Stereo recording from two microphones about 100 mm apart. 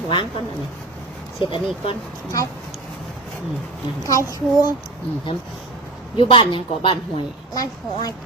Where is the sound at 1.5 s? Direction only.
55° left (ahead or behind).